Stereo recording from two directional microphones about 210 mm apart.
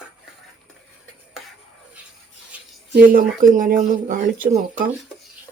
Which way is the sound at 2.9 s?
40° right (ahead or behind).